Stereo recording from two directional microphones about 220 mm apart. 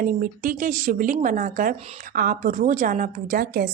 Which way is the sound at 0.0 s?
40° right (ahead or behind).